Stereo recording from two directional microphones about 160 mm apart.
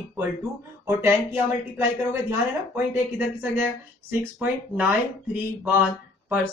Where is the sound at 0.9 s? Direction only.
15° right (ahead or behind).